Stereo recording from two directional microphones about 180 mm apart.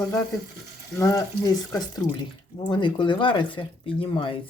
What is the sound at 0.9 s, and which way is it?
Speech, 20° left (ahead or behind).